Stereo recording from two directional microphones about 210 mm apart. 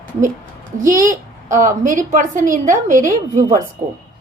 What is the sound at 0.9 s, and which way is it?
A child's voice, 40° right (ahead or behind).